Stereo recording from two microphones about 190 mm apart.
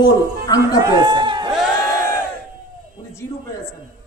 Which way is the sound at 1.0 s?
25° right (ahead or behind).